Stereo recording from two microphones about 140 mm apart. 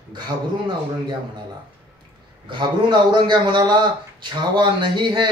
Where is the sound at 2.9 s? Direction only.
35° right (ahead or behind).